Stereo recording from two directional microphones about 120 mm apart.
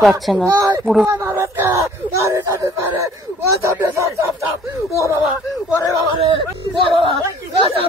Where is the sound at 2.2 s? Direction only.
25° right (ahead or behind).